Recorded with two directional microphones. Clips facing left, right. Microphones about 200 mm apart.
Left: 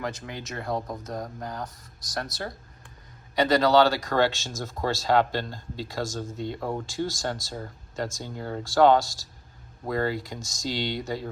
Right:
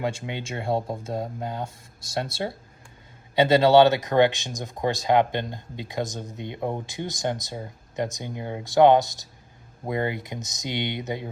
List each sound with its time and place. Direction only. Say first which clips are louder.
0.3 s speech: right 4 dB; 25° right (ahead or behind)